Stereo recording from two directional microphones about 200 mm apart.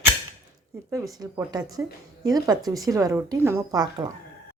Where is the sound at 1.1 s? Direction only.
20° right (ahead or behind).